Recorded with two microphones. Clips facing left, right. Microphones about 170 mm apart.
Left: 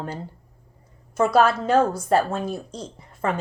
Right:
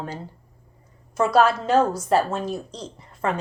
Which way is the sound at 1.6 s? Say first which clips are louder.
Even; 55° left (ahead or behind).